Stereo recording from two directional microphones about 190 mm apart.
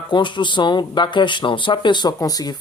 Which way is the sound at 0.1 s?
25° left (ahead or behind).